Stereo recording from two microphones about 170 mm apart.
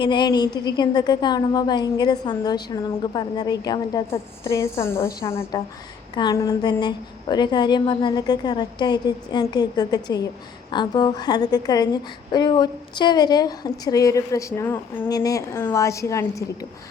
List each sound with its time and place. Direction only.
0.0 s a woman's voice: 25° left (ahead or behind)